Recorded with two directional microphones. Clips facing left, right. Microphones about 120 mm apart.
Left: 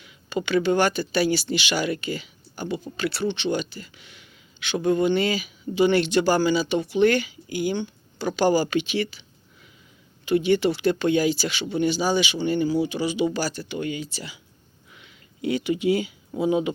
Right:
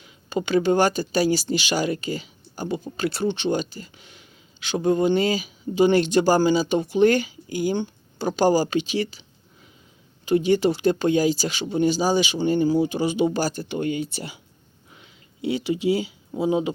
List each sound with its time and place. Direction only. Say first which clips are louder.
0.0 s speech: right 1 dB; 35° right (ahead or behind); by 14.4 s 50° right (ahead or behind)
14.8 s a sound: right 1 dB; 35° right (ahead or behind)
16.4 s speech: even; 30° right (ahead or behind)